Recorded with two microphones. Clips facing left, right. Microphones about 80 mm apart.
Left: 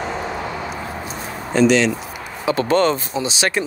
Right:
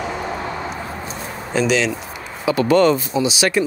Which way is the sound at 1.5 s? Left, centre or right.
Centre.